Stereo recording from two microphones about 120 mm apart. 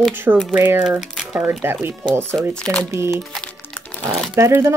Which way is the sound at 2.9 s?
20° right (ahead or behind).